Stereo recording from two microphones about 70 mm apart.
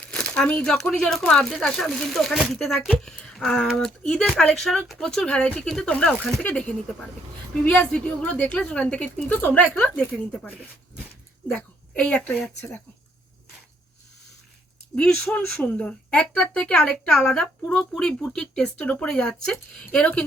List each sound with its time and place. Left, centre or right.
0.1 s a sound: centre
0.6 s a woman's voice: centre
6.4 s a woman's voice: centre
14.9 s a woman's voice: centre